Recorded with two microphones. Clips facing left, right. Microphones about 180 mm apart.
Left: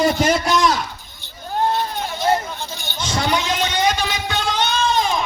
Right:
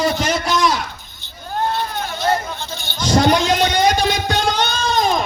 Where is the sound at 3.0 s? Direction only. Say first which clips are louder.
Right 7 dB; 40° right (ahead or behind).